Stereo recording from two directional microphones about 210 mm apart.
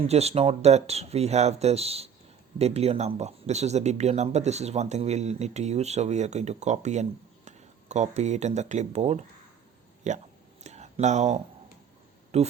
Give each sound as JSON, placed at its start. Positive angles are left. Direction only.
{"t": 0.1, "sound": "speech", "side_deg": -30}
{"t": 10.6, "sound": "a sound", "side_deg": -30}
{"t": 12.3, "sound": "speech", "side_deg": -30}